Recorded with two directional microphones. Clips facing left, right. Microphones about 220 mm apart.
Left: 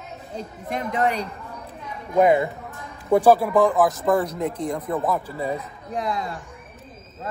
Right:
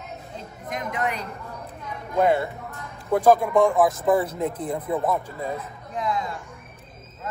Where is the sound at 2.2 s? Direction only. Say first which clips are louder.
Left 3 dB; 15° left (ahead or behind); by 4.8 s centre (ahead or behind).